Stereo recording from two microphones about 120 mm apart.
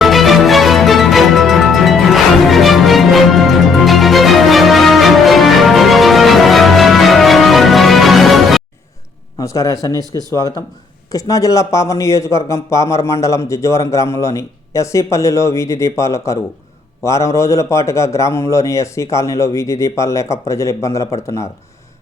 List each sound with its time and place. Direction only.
0.0 s music: centre (ahead or behind)
9.4 s a man's voice: 25° left (ahead or behind)